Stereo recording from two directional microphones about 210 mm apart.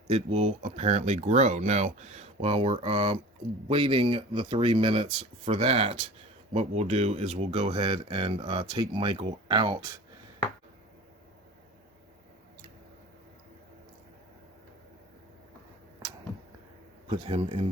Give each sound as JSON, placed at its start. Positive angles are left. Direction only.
{"t": 0.1, "sound": "speech", "side_deg": -30}
{"t": 17.1, "sound": "speech", "side_deg": -25}